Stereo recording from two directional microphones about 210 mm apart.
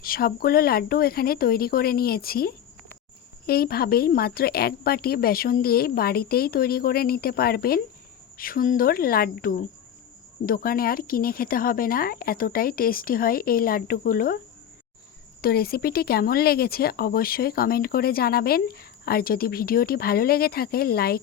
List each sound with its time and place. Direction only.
0.0 s speech: 45° left (ahead or behind)
15.4 s speech: 45° left (ahead or behind)